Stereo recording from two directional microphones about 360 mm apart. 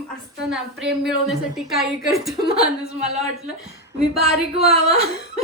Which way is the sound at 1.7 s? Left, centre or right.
Centre.